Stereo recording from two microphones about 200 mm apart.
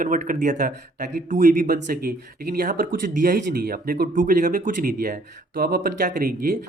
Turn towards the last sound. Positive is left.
turn(degrees=-45)  # may be behind; listen again after turning